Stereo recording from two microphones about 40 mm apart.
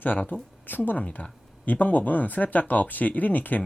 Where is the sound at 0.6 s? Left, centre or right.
Left.